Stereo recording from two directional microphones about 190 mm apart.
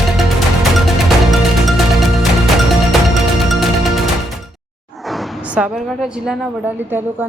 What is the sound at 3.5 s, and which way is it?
Music, centre (ahead or behind).